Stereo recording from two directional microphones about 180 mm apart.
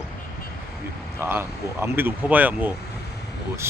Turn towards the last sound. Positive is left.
turn(degrees=-15)  # may be behind; listen again after turning